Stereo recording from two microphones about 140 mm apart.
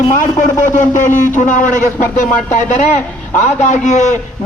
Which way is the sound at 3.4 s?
55° left (ahead or behind).